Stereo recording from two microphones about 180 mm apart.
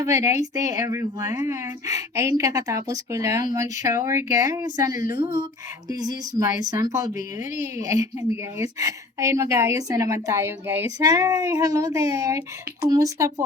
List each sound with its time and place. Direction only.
0.0 s a woman's voice: 15° right (ahead or behind)